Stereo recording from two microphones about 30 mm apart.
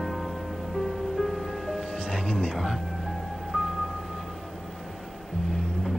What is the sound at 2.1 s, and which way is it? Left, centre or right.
Music, left.